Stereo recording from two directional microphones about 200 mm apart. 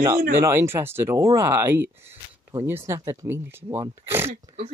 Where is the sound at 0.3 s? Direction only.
10° right (ahead or behind).